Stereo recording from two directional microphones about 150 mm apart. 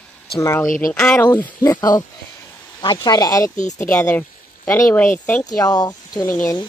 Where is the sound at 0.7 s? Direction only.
65° left (ahead or behind).